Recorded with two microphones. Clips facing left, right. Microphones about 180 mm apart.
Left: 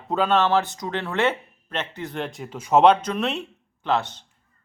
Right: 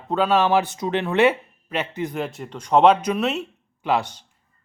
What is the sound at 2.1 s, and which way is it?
Speech, 5° right (ahead or behind).